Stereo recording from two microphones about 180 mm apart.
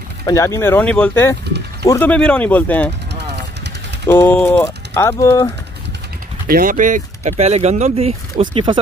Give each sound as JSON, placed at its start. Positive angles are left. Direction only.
{"t": 0.2, "sound": "speech", "side_deg": 15}
{"t": 4.1, "sound": "speech", "side_deg": 10}
{"t": 6.4, "sound": "speech", "side_deg": -55}